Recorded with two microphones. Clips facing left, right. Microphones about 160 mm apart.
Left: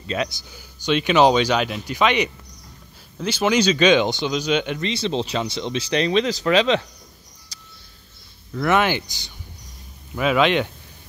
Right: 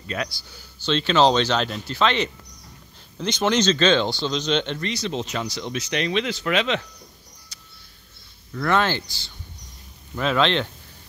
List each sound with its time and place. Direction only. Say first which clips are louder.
0.0 s speech: left 4 dB; 20° left (ahead or behind)
4.7 s speech: left 4 dB; 25° left (ahead or behind)
7.5 s a sound: left 2 dB; 35° left (ahead or behind)
8.5 s speech: left 2 dB; 15° left (ahead or behind)